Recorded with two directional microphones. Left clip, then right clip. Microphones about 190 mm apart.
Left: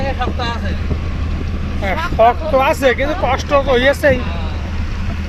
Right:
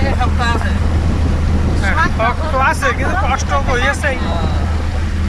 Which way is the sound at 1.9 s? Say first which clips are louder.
Left 4 dB; 20° left (ahead or behind).